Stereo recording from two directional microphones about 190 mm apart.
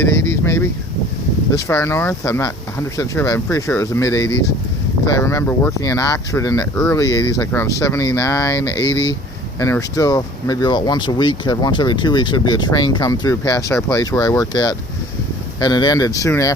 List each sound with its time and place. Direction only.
0.4 s speech: 15° left (ahead or behind)